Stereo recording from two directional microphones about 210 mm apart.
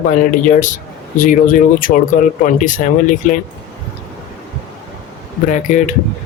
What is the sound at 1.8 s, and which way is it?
Speech, 40° left (ahead or behind).